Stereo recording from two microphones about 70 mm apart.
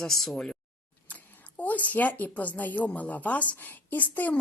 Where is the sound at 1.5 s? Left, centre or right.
Left.